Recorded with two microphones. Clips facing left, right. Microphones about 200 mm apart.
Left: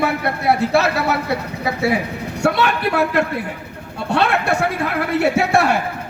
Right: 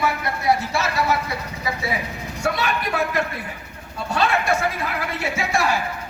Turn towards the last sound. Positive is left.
turn(degrees=65)  # may be behind; listen again after turning